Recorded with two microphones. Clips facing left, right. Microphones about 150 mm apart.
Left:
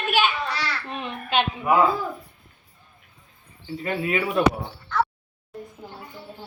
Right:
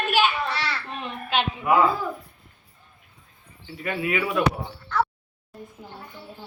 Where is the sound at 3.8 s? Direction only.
30° left (ahead or behind).